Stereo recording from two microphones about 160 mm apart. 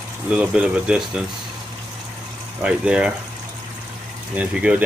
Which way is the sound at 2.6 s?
5° right (ahead or behind).